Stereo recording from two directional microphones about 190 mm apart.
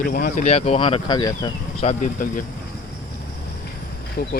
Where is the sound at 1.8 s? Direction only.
35° left (ahead or behind).